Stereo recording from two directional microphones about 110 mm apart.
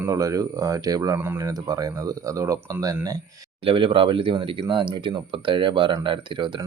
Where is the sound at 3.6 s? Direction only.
55° right (ahead or behind).